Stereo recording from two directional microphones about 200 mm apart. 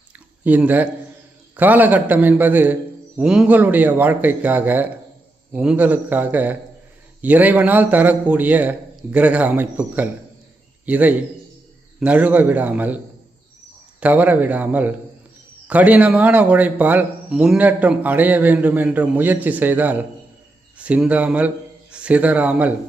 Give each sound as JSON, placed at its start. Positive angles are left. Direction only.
{"t": 0.4, "sound": "a man's voice", "side_deg": -10}
{"t": 14.0, "sound": "a man's voice", "side_deg": -10}